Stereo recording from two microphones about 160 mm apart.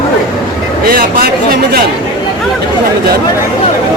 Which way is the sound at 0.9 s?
70° right (ahead or behind).